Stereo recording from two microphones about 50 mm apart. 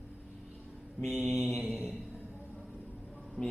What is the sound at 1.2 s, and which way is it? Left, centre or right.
Mantra, centre.